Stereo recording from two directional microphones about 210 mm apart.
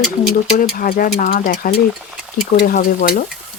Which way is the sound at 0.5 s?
40° left (ahead or behind).